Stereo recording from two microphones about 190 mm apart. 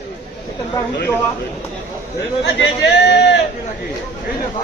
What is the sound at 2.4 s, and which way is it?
Speech, 65° left (ahead or behind).